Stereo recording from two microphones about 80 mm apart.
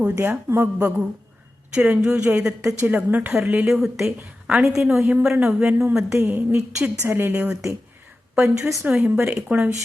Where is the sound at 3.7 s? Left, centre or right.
Centre.